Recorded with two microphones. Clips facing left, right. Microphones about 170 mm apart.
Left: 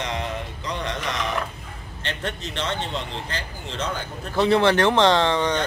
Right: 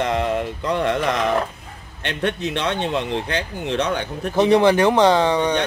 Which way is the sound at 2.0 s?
65° right (ahead or behind).